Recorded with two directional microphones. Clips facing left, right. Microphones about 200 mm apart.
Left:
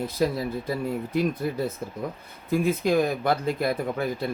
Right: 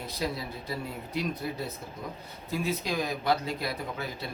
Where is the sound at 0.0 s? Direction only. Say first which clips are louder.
Left 8 dB; 50° left (ahead or behind).